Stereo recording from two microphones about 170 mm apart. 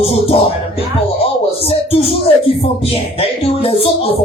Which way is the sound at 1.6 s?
35° left (ahead or behind).